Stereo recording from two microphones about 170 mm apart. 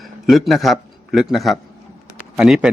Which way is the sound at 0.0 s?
Centre (ahead or behind).